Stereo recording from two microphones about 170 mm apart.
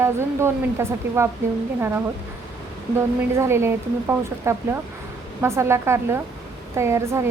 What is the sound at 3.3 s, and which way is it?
Speech, 15° right (ahead or behind).